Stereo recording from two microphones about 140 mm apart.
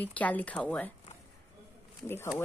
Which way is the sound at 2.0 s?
15° left (ahead or behind).